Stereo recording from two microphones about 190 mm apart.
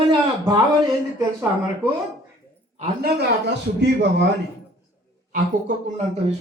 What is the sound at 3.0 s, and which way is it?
Speech, 65° right (ahead or behind).